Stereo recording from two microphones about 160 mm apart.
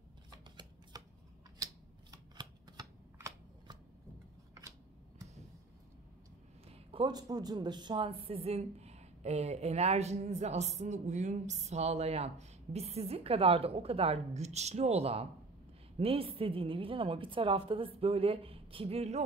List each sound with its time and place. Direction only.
0.3 s shuffling cards: 25° right (ahead or behind)
6.7 s a woman's voice: 35° right (ahead or behind)